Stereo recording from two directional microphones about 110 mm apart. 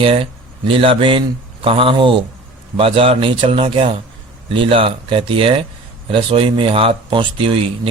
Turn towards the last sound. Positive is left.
turn(degrees=-55)  # may be behind; listen again after turning